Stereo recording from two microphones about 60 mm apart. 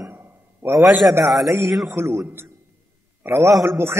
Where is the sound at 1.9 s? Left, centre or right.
Right.